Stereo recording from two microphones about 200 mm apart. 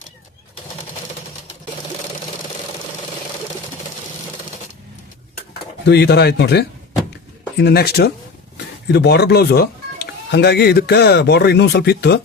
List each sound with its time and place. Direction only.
5.8 s speech: 55° left (ahead or behind)